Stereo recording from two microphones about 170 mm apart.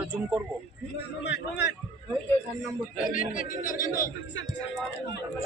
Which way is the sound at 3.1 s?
55° left (ahead or behind).